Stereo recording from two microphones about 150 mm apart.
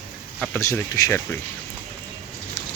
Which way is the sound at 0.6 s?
20° left (ahead or behind).